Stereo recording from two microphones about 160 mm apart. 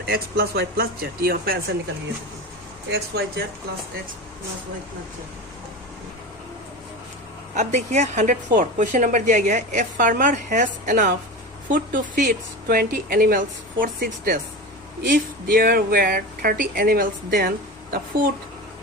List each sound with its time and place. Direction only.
0.1 s speech: 75° right (ahead or behind)
2.9 s speech: 90° right
7.5 s a woman's voice: 45° right (ahead or behind); by 17.5 s 65° right (ahead or behind)